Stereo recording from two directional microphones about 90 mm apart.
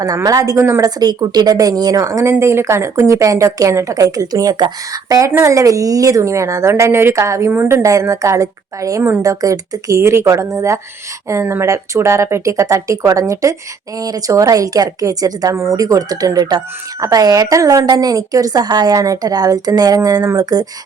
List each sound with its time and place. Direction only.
0.0 s speech: 45° right (ahead or behind)
0.8 s speech: 45° right (ahead or behind)
15.5 s speech: 30° right (ahead or behind)